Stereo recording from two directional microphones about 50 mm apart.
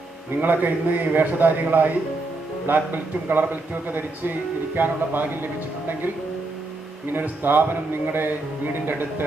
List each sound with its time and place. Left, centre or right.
0.3 s a man's voice: right
7.1 s a man's voice: right